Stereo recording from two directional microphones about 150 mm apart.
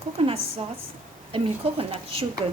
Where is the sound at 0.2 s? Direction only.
40° right (ahead or behind).